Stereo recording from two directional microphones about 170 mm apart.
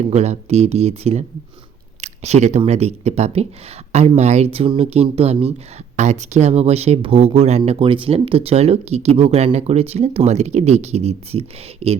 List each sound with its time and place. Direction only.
0.0 s speech: 40° right (ahead or behind)